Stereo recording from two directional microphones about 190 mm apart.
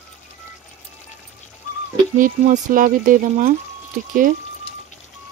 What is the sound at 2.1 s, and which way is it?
Speech, 45° right (ahead or behind).